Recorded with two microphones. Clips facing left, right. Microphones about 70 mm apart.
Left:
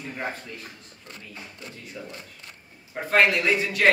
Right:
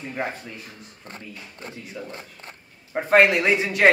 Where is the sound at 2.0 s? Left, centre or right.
Centre.